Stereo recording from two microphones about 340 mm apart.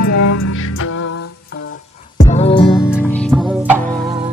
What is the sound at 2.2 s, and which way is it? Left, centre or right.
Music, centre.